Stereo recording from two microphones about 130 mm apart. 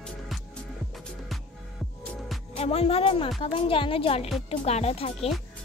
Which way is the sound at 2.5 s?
50° left (ahead or behind).